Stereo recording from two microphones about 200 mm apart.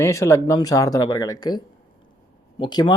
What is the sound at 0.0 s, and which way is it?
Speech, 15° left (ahead or behind).